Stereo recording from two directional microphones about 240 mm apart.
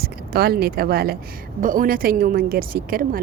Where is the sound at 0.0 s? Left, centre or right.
Right.